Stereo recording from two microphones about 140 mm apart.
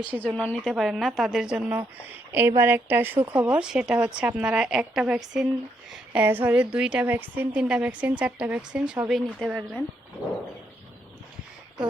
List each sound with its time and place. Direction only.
0.2 s a woman's voice: 10° left (ahead or behind)